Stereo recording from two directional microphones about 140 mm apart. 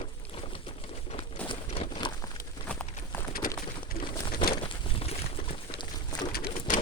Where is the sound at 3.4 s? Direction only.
85° left.